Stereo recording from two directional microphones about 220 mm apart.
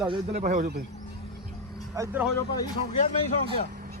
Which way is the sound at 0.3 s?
35° right (ahead or behind).